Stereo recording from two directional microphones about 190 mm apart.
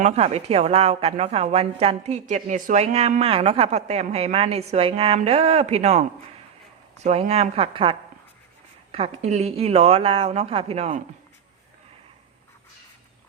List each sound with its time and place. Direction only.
0.0 s a woman's voice: 35° right (ahead or behind)